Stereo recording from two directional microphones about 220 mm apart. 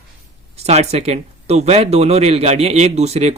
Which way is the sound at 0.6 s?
30° right (ahead or behind).